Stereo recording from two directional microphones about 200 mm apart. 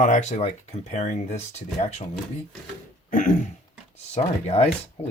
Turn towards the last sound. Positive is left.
turn(degrees=30)  # may be behind; listen again after turning